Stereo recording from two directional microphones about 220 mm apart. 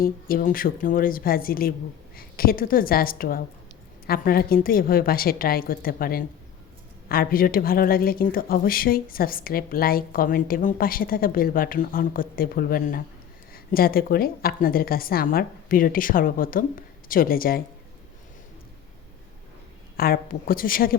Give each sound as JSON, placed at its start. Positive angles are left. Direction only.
{"t": 0.0, "sound": "a woman's voice", "side_deg": 40}
{"t": 20.0, "sound": "a woman's voice", "side_deg": 40}